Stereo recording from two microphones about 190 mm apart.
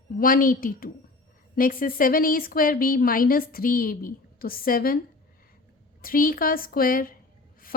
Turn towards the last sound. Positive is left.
turn(degrees=50)  # may be behind; listen again after turning